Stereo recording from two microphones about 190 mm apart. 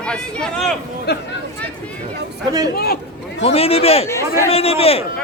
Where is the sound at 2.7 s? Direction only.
55° left (ahead or behind).